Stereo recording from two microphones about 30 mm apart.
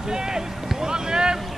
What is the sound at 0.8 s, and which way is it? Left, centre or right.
Boat, right.